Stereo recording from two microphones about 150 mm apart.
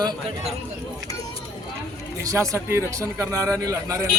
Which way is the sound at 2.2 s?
20° right (ahead or behind).